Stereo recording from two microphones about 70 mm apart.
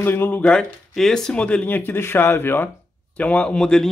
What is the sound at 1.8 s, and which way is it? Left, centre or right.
Speech, left.